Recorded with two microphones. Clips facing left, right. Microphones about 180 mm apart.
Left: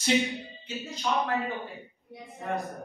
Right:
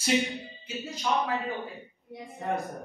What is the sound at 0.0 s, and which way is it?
Speech, centre (ahead or behind).